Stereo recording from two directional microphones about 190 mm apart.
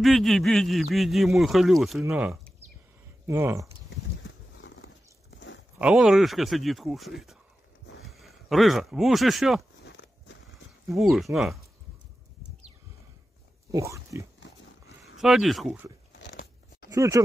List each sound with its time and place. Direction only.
0.0 s speech: centre (ahead or behind)
4.2 s a sound: 80° left
5.8 s speech: 5° right (ahead or behind)
9.8 s walk: 65° left (ahead or behind)
10.9 s speech: centre (ahead or behind)
13.7 s speech: 15° right (ahead or behind)
15.1 s speech: centre (ahead or behind)
16.1 s crunch: 60° left (ahead or behind)
16.9 s speech: 15° right (ahead or behind)